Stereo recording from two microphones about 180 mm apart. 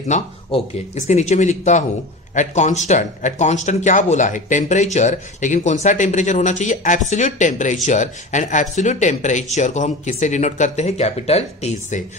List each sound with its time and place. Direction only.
0.1 s speech: 40° left (ahead or behind)